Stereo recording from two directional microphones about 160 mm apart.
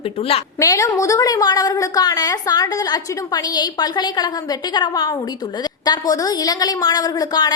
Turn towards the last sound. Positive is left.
turn(degrees=25)  # may be behind; listen again after turning